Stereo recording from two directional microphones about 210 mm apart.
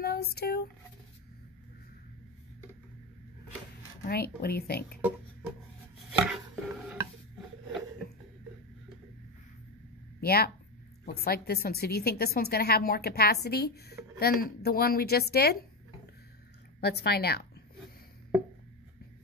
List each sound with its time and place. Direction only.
0.0 s speech: 50° left (ahead or behind)
4.0 s a woman's voice: 50° left (ahead or behind)
6.1 s chopping: 5° right (ahead or behind)
10.2 s a woman's voice: 45° left (ahead or behind)
16.8 s a woman's voice: 50° left (ahead or behind)